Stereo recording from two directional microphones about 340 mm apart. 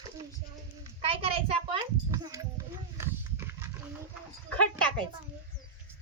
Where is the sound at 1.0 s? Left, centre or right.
Centre.